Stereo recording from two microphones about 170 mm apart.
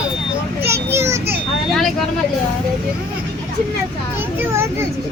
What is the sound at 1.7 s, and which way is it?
Speech, centre (ahead or behind).